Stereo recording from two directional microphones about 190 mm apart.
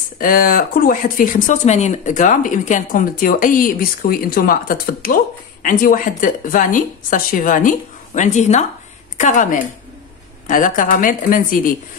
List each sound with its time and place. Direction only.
0.2 s speech: 45° left (ahead or behind)